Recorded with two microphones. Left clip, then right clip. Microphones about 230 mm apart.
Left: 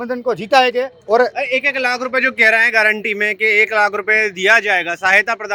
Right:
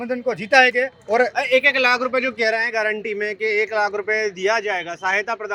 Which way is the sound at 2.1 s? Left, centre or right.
Left.